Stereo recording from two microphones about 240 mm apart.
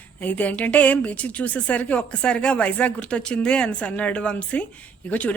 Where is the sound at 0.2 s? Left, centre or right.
Centre.